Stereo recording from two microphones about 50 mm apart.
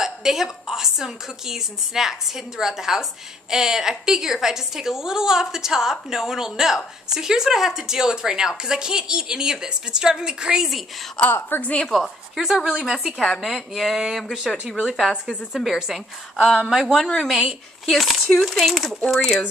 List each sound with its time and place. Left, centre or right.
0.0 s a woman's voice: centre
11.2 s a woman's voice: centre
11.9 s a woman's voice: centre
13.2 s a woman's voice: centre
16.9 s a woman's voice: centre
17.3 s speech: centre
19.0 s a woman's voice: centre